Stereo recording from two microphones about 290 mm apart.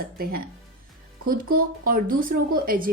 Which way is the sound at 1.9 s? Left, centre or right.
Right.